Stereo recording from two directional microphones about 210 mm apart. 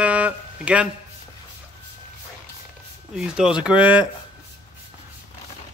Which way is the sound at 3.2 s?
5° right (ahead or behind).